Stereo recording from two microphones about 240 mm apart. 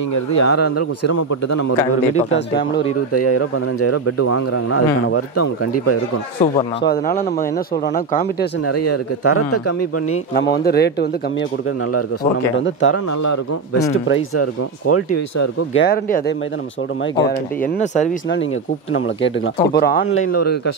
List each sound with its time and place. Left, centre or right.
0.4 s speech: left
2.3 s speech: left
3.1 s a man's voice: left
6.4 s speech: left
8.6 s a man's voice: left
10.3 s speech: left
12.6 s speech: left
14.0 s speech: left
15.1 s speech: left
15.7 s speech: left
18.9 s speech: left